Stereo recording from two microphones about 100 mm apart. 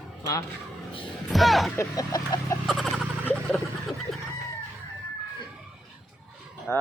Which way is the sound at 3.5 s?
Centre (ahead or behind).